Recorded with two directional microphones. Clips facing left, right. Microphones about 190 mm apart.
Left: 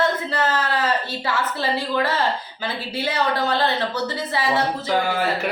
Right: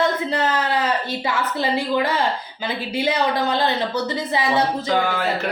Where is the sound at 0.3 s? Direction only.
15° right (ahead or behind).